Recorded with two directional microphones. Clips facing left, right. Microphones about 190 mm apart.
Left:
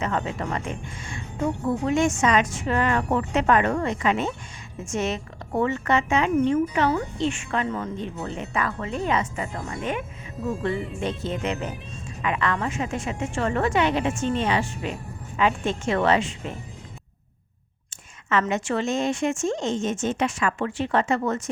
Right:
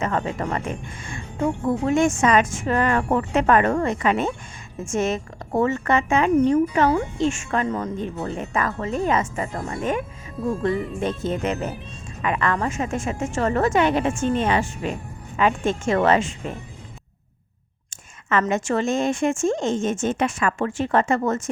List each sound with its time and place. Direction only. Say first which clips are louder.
0.0 s speech: right 3 dB; 45° right (ahead or behind)
1.9 s speech: right 3 dB; 50° right (ahead or behind)
6.3 s speech: right 4 dB; 40° right (ahead or behind)
18.3 s speech: right 2 dB; 50° right (ahead or behind)